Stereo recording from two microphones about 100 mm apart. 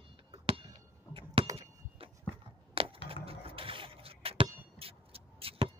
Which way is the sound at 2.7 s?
65° right (ahead or behind).